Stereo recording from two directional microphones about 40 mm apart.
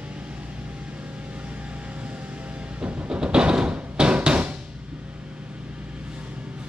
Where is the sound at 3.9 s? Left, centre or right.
Right.